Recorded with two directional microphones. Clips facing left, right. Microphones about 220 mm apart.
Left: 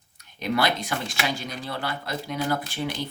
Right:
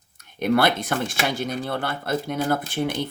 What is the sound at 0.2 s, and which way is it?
Speech, 55° right (ahead or behind).